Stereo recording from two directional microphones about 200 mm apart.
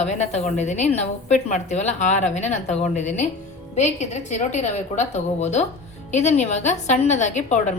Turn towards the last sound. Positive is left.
turn(degrees=35)  # may be behind; listen again after turning